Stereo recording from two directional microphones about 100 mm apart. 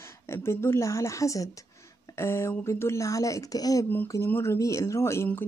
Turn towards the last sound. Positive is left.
turn(degrees=25)  # may be behind; listen again after turning